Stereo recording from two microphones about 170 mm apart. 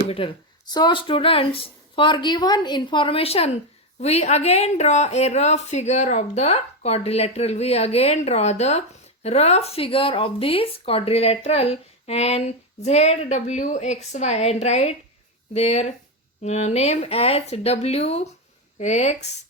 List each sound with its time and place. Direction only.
0.1 s speech: 30° left (ahead or behind)